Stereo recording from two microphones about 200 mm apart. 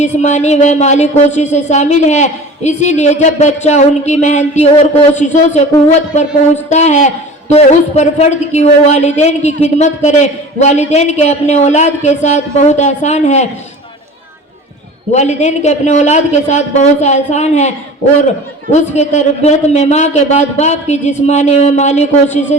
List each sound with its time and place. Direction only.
0.0 s a woman's voice: 35° left (ahead or behind)
6.7 s a woman's voice: 35° left (ahead or behind)
15.1 s a woman's voice: 35° left (ahead or behind)